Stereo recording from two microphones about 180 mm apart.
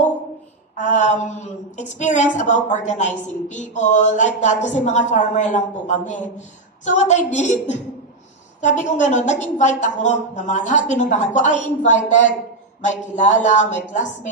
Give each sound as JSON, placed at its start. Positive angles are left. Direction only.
{"t": 0.8, "sound": "a woman's voice", "side_deg": 45}